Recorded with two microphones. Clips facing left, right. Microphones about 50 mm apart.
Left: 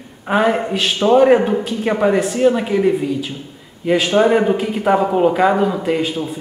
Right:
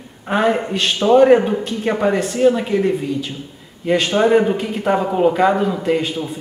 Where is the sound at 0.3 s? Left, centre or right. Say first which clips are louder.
Left 1 dB; centre.